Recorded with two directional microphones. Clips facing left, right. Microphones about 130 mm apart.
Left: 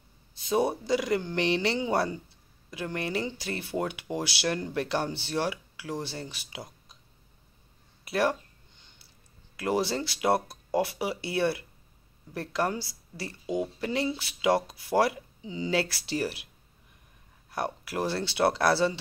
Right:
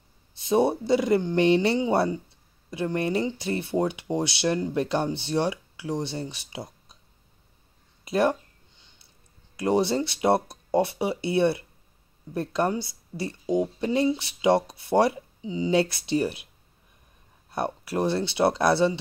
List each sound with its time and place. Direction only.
0.4 s speech: 25° right (ahead or behind)
8.0 s speech: 20° right (ahead or behind)
9.6 s speech: 25° right (ahead or behind)
17.5 s speech: 25° right (ahead or behind)